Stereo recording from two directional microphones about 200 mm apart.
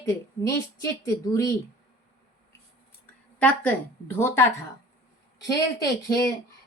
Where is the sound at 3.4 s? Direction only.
10° left (ahead or behind).